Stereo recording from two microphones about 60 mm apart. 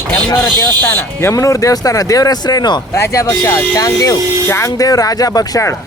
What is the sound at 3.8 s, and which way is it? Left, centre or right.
Speech, left.